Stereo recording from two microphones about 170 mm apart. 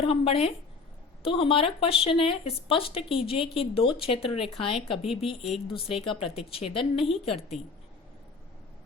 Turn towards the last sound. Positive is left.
turn(degrees=35)  # may be behind; listen again after turning